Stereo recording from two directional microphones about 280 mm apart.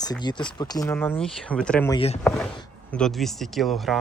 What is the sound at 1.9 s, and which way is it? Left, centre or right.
Speech, left.